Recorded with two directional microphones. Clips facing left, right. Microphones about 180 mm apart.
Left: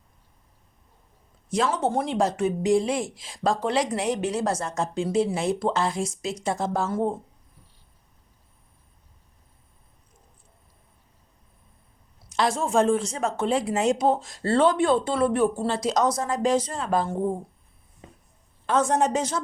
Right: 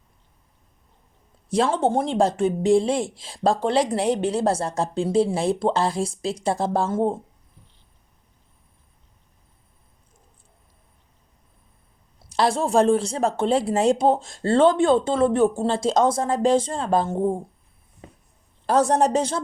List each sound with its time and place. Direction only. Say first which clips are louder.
1.5 s a woman's voice: right 4 dB; 30° right (ahead or behind)
12.3 s a woman's voice: right 3 dB; 35° right (ahead or behind)
18.0 s a sound: right 3 dB; 60° right (ahead or behind)
18.6 s a woman's voice: right 3 dB; 35° right (ahead or behind)